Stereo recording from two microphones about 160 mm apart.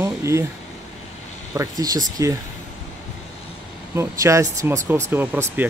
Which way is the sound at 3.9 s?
20° right (ahead or behind).